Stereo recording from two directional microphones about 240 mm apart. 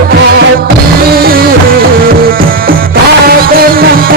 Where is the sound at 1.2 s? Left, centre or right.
Right.